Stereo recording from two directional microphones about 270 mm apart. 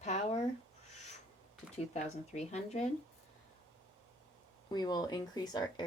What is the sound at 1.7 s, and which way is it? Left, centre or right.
Speech, left.